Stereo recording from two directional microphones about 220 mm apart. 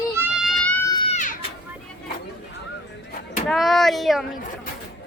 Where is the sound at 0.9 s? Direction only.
25° left (ahead or behind).